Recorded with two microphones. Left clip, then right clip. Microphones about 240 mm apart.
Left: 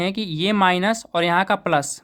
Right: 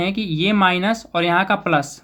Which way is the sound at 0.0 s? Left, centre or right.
Left.